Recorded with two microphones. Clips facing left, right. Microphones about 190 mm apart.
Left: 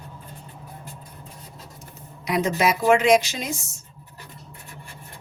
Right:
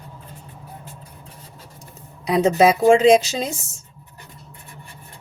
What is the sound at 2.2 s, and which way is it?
Speech, 30° right (ahead or behind).